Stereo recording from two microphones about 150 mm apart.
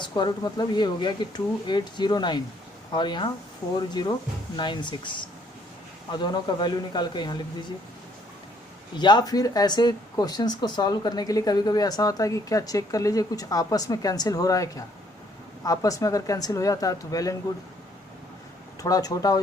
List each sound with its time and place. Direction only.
0.0 s speech: 30° left (ahead or behind)
9.0 s speech: 30° left (ahead or behind)
18.8 s speech: 25° left (ahead or behind)